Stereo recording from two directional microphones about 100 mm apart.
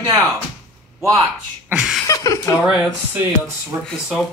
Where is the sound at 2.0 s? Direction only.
35° left (ahead or behind).